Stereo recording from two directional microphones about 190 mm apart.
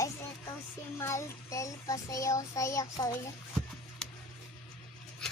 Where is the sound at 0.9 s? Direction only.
15° left (ahead or behind).